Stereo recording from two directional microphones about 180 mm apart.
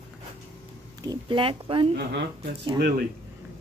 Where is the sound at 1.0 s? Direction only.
25° right (ahead or behind).